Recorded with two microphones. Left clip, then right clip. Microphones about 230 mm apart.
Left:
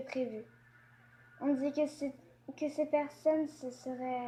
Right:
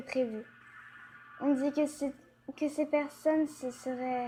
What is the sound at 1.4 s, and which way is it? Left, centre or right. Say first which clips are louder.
Speech: right 3 dB; right.